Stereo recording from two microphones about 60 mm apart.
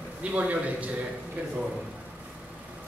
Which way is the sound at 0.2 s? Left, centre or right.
Right.